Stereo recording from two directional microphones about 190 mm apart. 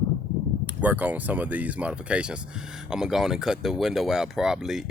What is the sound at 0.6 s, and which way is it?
Speech, 10° right (ahead or behind).